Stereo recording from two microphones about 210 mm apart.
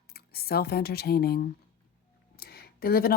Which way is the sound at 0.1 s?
45° left (ahead or behind).